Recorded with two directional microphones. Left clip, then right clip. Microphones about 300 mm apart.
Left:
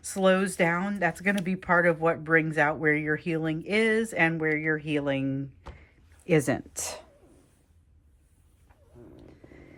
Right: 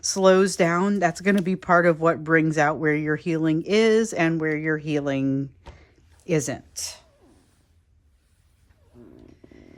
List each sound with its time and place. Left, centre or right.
0.1 s speech: centre
6.7 s speech: centre